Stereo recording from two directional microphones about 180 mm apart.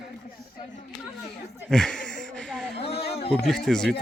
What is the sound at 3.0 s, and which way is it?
Speech, 60° left (ahead or behind).